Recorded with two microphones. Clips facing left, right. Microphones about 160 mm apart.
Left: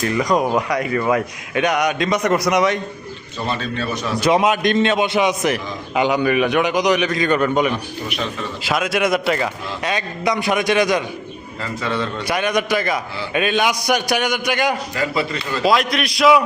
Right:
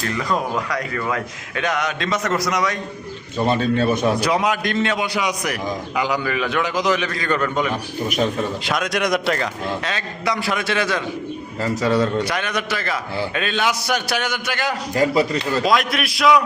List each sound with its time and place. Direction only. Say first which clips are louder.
0.0 s a man's voice: left 5 dB; 15° left (ahead or behind)
3.3 s a man's voice: right 6 dB; 50° right (ahead or behind)
4.2 s a man's voice: left 4 dB; 20° left (ahead or behind)
8.0 s a man's voice: right 8 dB; 45° right (ahead or behind)
8.6 s a man's voice: left 6 dB; 5° left (ahead or behind)
9.8 s a man's voice: left 3 dB; 15° left (ahead or behind)
11.6 s speech: right 5 dB; 40° right (ahead or behind)
12.2 s a man's voice: left 4 dB; 10° left (ahead or behind)
14.9 s speech: right 4 dB; 40° right (ahead or behind)
15.6 s a man's voice: left 6 dB; centre (ahead or behind)